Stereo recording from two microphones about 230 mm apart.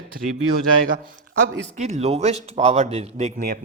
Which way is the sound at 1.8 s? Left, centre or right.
Right.